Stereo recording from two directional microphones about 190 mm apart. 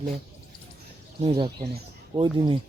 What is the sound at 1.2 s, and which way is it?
Speech, 30° right (ahead or behind).